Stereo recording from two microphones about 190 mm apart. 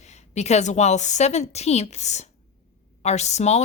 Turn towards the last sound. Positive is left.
turn(degrees=35)  # may be behind; listen again after turning